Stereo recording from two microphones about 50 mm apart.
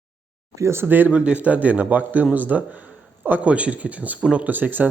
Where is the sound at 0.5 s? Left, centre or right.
Right.